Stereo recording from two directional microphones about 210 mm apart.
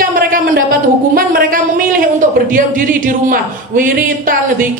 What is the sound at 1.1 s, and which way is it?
A man's voice, 45° right (ahead or behind).